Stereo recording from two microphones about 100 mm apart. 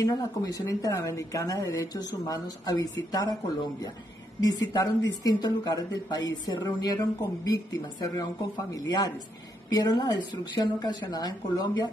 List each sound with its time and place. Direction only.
0.0 s a woman's voice: 35° left (ahead or behind)
4.4 s a woman's voice: 40° left (ahead or behind)